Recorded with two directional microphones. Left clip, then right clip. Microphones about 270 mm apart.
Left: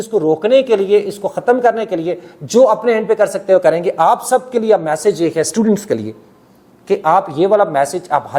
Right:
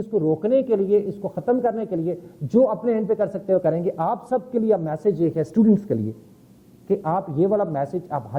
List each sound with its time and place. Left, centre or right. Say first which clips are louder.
0.1 s speech: left 7 dB; left
0.4 s a man's voice: left 10 dB; centre